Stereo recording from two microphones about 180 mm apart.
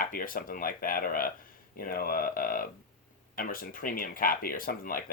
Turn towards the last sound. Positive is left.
turn(degrees=50)  # may be behind; listen again after turning